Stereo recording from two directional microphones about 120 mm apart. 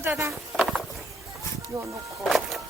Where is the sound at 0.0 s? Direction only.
20° right (ahead or behind).